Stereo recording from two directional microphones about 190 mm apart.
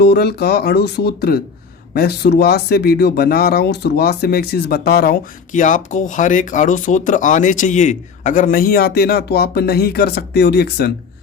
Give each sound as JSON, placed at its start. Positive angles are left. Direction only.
{"t": 0.0, "sound": "speech", "side_deg": 55}
{"t": 5.5, "sound": "speech", "side_deg": 40}